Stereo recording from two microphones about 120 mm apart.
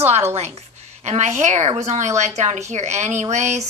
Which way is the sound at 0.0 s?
60° right (ahead or behind).